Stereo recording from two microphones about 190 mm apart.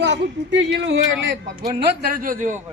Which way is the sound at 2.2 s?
45° right (ahead or behind).